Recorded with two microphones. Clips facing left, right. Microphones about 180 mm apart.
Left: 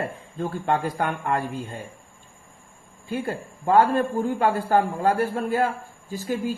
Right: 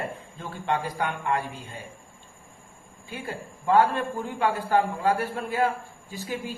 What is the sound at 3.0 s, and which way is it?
A man's voice, 45° left (ahead or behind).